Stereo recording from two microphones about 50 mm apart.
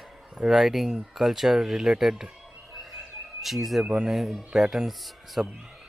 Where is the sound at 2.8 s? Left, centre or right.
Centre.